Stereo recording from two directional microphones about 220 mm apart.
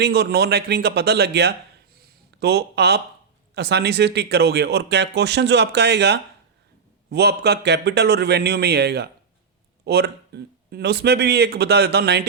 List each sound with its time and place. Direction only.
0.0 s speech: 45° right (ahead or behind)
2.0 s a sound: 45° right (ahead or behind)
3.5 s speech: 50° right (ahead or behind)